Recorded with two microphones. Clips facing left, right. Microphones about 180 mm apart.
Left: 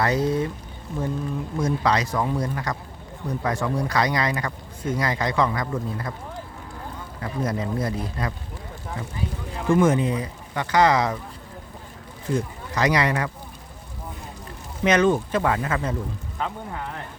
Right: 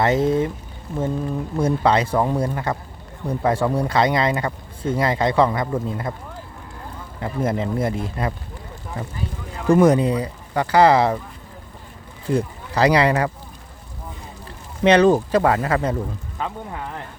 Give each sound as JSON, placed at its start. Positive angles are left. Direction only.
{"t": 0.0, "sound": "speech", "side_deg": -25}
{"t": 1.5, "sound": "speech", "side_deg": -30}
{"t": 7.2, "sound": "speech", "side_deg": -25}
{"t": 9.6, "sound": "speech", "side_deg": -35}
{"t": 12.2, "sound": "speech", "side_deg": -35}
{"t": 14.8, "sound": "speech", "side_deg": -35}